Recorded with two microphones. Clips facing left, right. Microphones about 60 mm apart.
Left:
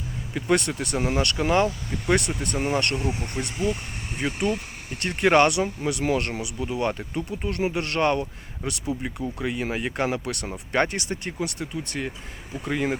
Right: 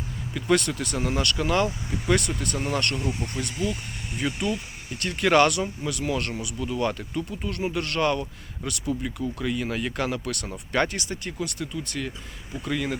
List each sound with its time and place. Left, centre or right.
0.3 s speech: left